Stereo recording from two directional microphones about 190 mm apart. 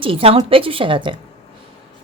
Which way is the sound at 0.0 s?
30° right (ahead or behind).